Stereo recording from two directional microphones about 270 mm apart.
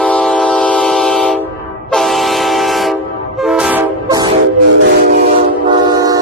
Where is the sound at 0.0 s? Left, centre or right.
Centre.